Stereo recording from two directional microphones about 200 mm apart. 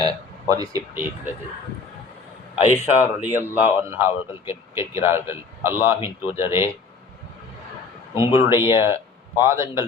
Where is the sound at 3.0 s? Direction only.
10° right (ahead or behind).